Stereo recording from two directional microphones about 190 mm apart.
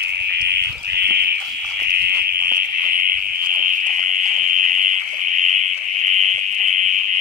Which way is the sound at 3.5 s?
40° right (ahead or behind).